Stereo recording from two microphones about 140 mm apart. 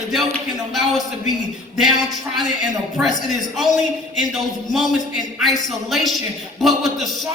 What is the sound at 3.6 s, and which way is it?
Speech, centre (ahead or behind).